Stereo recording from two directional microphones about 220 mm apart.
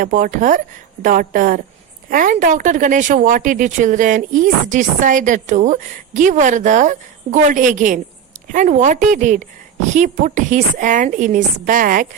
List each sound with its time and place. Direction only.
0.0 s speech: 35° right (ahead or behind)